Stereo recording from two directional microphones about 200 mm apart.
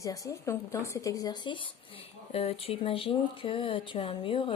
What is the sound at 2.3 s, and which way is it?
A woman's voice, 30° left (ahead or behind).